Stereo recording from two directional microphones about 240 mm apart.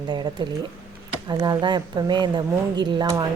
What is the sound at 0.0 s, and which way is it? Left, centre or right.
A woman's voice, centre.